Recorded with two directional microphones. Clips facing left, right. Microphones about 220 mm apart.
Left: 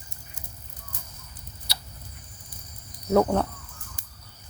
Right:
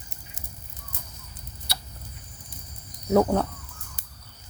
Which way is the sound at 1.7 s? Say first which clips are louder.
Right 3 dB; 50° right (ahead or behind).